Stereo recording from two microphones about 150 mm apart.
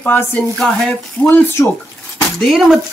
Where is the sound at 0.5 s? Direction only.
5° left (ahead or behind).